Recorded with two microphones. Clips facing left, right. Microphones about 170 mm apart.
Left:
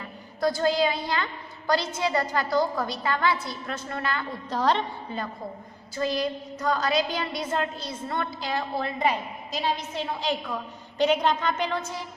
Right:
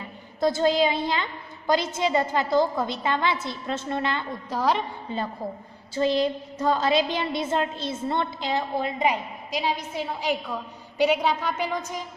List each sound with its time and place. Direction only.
0.0 s a woman's voice: 25° right (ahead or behind)
4.5 s a woman's voice: 10° right (ahead or behind)
5.9 s a woman's voice: 25° right (ahead or behind); by 12.0 s 10° right (ahead or behind)